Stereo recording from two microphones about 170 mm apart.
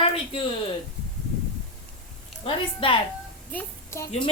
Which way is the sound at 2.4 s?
30° left (ahead or behind).